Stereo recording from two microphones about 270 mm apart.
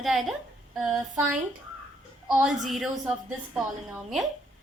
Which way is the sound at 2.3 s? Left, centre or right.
Centre.